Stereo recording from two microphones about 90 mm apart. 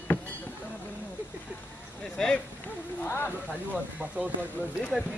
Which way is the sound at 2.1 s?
10° left (ahead or behind).